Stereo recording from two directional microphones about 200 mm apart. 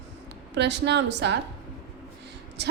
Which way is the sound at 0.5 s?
60° right (ahead or behind).